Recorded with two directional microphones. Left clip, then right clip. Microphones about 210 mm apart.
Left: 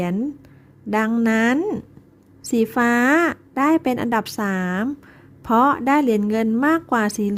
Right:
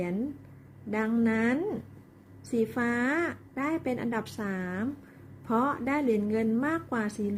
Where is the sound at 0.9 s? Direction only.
50° left (ahead or behind).